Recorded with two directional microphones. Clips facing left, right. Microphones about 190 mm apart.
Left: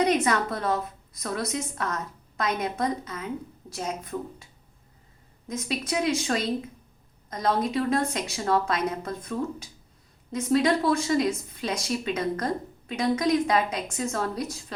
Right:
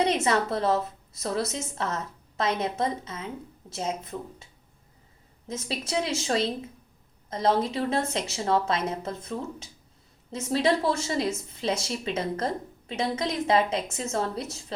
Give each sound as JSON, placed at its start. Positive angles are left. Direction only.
{"t": 0.0, "sound": "speech", "side_deg": -30}
{"t": 5.5, "sound": "speech", "side_deg": -25}